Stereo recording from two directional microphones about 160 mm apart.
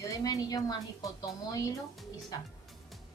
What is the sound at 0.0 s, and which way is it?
A woman's voice, 20° left (ahead or behind).